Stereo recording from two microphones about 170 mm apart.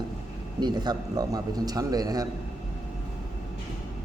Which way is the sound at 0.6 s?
25° right (ahead or behind).